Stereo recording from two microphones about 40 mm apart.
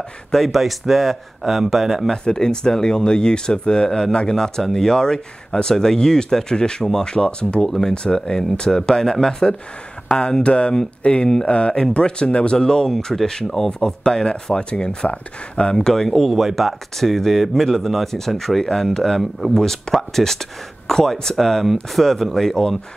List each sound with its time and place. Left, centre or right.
0.3 s speech: centre
2.2 s speech: centre
7.6 s speech: centre
12.8 s speech: centre; by 15.7 s left
15.7 s speech: centre